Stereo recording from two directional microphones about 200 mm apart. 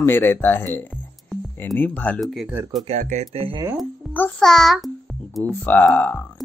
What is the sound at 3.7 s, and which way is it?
Music, 5° left (ahead or behind).